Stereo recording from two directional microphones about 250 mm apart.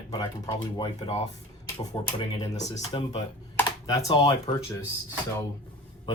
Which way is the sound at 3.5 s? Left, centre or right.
Centre.